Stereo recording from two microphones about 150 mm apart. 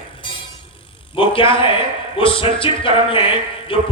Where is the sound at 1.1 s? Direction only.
35° left (ahead or behind).